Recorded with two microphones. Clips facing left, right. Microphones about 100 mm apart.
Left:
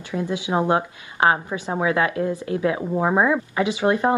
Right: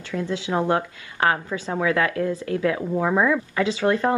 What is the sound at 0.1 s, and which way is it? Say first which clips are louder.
Speech: left 1 dB; 20° left (ahead or behind).